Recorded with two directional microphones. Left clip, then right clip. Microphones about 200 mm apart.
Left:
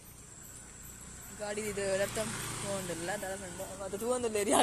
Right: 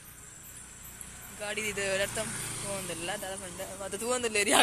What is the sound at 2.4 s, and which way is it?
Speech, centre (ahead or behind).